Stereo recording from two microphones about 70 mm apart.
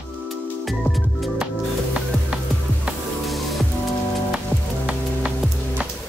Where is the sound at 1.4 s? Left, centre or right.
Centre.